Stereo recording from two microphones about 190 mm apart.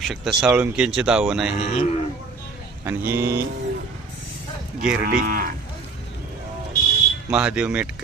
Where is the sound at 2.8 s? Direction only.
10° right (ahead or behind).